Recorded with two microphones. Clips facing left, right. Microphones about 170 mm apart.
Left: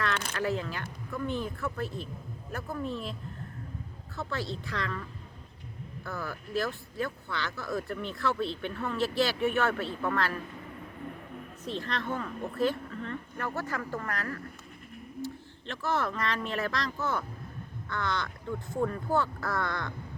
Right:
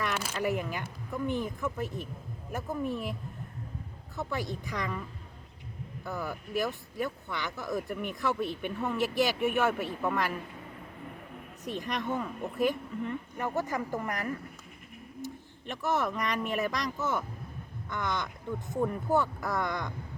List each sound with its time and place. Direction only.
0.0 s speech: 5° right (ahead or behind)
4.2 s speech: 15° right (ahead or behind)
6.1 s speech: 15° right (ahead or behind)
11.6 s speech: 15° right (ahead or behind)